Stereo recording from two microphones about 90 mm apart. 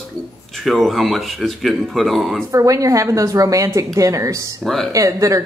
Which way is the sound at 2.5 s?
40° right (ahead or behind).